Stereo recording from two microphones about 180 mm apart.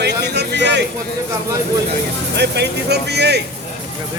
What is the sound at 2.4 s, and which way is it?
A man's voice, 70° right (ahead or behind).